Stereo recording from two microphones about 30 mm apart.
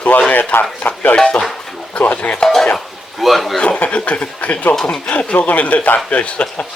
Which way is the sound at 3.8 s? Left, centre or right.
Left.